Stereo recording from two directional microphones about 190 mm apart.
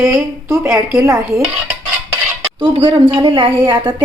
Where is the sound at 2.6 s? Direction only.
25° right (ahead or behind).